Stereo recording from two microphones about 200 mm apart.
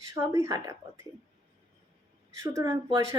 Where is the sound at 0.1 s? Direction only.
15° right (ahead or behind).